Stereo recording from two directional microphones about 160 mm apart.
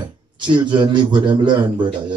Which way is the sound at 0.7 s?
30° right (ahead or behind).